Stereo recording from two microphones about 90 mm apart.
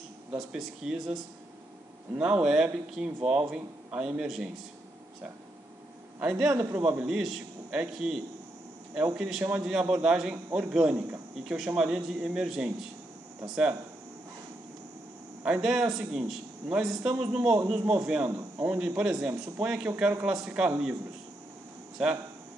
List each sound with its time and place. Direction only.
0.4 s a man's voice: 5° right (ahead or behind)
6.1 s a man's voice: 15° right (ahead or behind)
6.5 s a man's voice: 25° right (ahead or behind)
6.8 s a man's voice: 15° right (ahead or behind)
9.4 s a man's voice: 20° right (ahead or behind)
15.4 s a man's voice: 10° right (ahead or behind)